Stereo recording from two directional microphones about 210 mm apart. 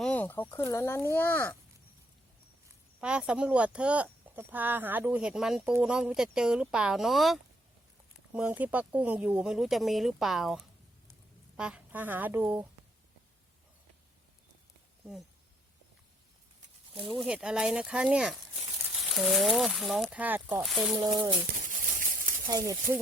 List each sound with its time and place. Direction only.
0.0 s speech: 5° left (ahead or behind)
3.0 s speech: 5° right (ahead or behind)
11.1 s a sound: 5° right (ahead or behind)
17.2 s speech: 5° right (ahead or behind)
20.9 s speech: 20° right (ahead or behind)
22.4 s speech: 15° right (ahead or behind)